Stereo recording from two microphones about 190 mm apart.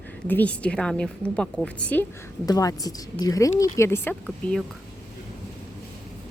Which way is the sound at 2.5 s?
20° left (ahead or behind).